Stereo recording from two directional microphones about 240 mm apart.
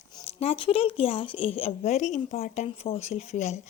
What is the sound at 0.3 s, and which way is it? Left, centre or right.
Speech, left.